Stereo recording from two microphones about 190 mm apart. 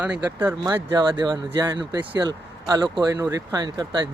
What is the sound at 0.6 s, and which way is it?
Speech, 20° right (ahead or behind).